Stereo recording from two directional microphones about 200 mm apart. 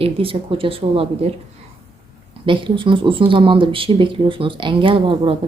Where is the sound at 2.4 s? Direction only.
25° right (ahead or behind).